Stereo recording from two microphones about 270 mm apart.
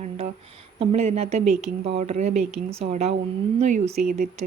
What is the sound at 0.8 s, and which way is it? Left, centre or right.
A woman's voice, right.